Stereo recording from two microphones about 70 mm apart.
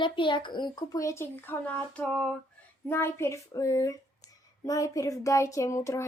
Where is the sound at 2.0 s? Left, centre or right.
Centre.